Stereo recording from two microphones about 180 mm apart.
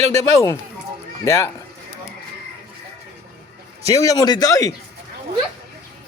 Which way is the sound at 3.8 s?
20° left (ahead or behind).